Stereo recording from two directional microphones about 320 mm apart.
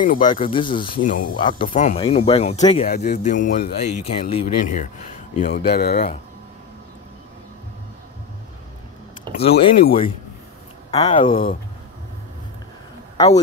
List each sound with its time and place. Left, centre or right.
0.2 s speech: centre
9.4 s speech: centre